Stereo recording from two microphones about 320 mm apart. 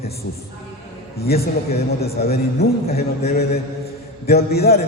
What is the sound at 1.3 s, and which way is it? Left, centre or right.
A man's voice, left.